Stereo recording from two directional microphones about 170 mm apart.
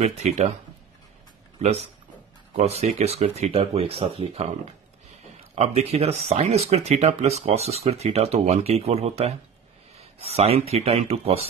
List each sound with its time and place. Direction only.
0.0 s speech: 40° right (ahead or behind)
1.6 s speech: 40° right (ahead or behind)
5.5 s speech: 40° right (ahead or behind)